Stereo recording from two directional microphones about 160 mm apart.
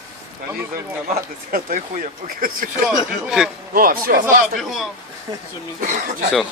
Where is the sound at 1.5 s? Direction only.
60° right (ahead or behind).